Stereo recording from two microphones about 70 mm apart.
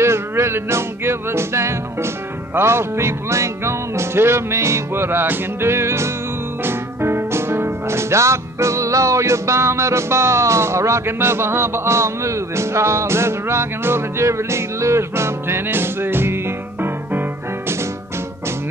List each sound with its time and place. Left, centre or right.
0.0 s music: right